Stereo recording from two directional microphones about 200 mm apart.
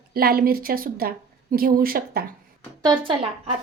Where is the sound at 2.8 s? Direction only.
25° right (ahead or behind).